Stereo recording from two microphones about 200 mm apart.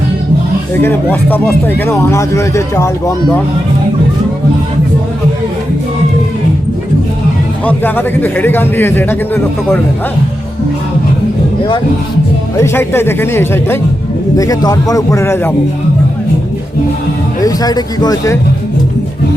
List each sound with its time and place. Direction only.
0.8 s speech: 10° left (ahead or behind)
7.6 s speech: 10° left (ahead or behind)
12.5 s speech: 15° left (ahead or behind)
17.4 s speech: 20° left (ahead or behind)